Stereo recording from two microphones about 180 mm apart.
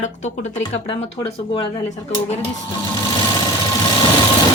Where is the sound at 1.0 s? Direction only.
30° left (ahead or behind).